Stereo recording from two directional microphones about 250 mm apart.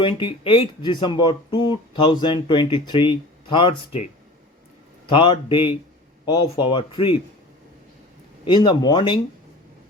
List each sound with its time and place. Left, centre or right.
0.0 s speech: centre
8.4 s speech: centre